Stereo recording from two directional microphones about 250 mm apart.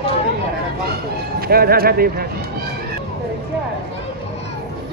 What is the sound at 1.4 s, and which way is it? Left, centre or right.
Speech, right.